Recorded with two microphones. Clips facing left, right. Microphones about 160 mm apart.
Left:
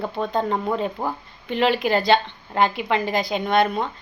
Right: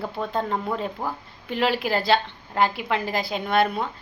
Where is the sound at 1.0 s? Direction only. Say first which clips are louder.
Left 3 dB; 20° left (ahead or behind).